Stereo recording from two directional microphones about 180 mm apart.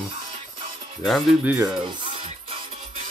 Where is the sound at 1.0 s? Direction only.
Centre (ahead or behind).